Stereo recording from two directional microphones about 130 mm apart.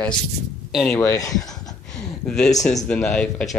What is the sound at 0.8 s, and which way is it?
Speech, 20° left (ahead or behind).